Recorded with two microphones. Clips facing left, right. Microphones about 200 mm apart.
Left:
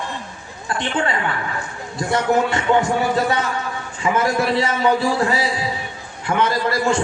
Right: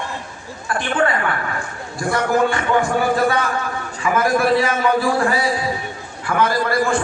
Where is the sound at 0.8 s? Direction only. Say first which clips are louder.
Right 3 dB; 25° left (ahead or behind).